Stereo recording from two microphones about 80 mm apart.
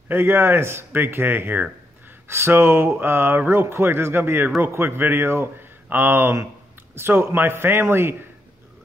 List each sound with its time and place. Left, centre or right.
0.1 s speech: right